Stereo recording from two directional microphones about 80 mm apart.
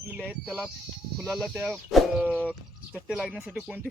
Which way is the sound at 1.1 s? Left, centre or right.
Centre.